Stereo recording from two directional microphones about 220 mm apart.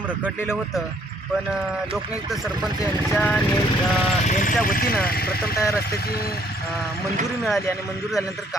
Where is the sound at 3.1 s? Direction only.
5° left (ahead or behind).